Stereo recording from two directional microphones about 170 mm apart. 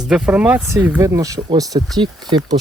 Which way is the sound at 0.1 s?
5° right (ahead or behind).